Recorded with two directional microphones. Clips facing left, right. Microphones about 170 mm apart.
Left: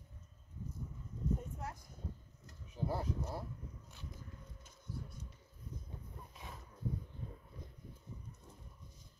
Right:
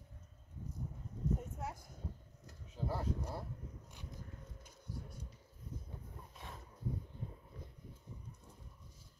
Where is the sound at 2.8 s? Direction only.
15° left (ahead or behind).